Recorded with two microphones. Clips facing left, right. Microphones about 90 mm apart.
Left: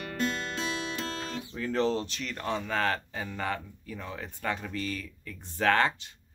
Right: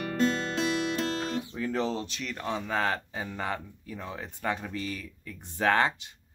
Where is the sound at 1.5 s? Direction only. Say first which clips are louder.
Left 6 dB; 10° right (ahead or behind).